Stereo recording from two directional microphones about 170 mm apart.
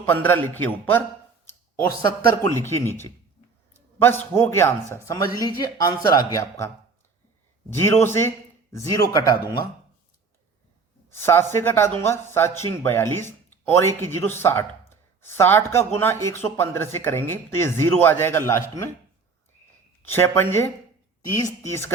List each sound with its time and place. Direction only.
0.0 s a man's voice: 10° left (ahead or behind)
7.7 s a man's voice: 15° left (ahead or behind)
11.1 s a man's voice: 15° left (ahead or behind)
20.1 s a man's voice: 15° left (ahead or behind)